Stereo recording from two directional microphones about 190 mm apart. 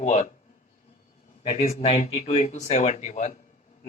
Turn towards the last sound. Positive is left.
turn(degrees=40)  # may be behind; listen again after turning